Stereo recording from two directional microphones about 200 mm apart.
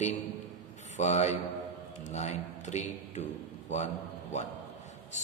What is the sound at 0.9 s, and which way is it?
A man's voice, 35° left (ahead or behind).